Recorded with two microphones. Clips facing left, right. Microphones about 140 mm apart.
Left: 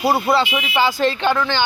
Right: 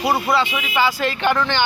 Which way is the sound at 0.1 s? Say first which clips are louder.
Left 1 dB; 30° left (ahead or behind).